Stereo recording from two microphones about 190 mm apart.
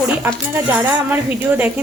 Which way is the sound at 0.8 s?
10° right (ahead or behind).